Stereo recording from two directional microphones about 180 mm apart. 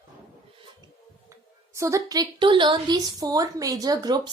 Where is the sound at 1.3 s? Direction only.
15° right (ahead or behind).